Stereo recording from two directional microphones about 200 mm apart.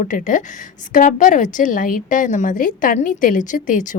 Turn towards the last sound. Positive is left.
turn(degrees=40)  # may be behind; listen again after turning